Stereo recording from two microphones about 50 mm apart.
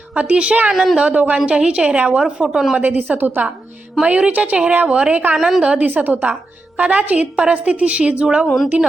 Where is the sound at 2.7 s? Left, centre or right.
Right.